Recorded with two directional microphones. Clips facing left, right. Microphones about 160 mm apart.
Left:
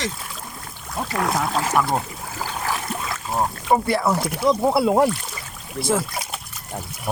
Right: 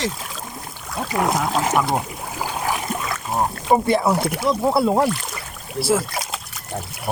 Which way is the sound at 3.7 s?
20° right (ahead or behind).